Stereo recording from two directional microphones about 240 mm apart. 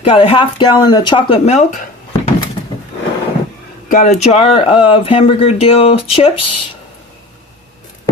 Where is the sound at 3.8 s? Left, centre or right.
Left.